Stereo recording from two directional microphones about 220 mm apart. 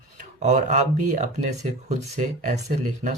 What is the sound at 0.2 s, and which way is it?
Speech, 35° right (ahead or behind).